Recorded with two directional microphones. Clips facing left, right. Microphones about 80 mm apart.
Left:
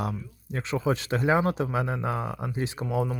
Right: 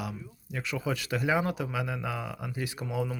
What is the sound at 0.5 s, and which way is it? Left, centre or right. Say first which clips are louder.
A man's voice: left 5 dB; left.